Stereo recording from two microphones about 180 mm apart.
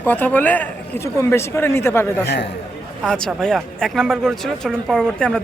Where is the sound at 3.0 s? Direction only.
Centre (ahead or behind).